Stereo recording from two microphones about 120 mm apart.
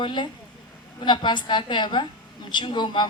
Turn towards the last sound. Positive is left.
turn(degrees=40)  # may be behind; listen again after turning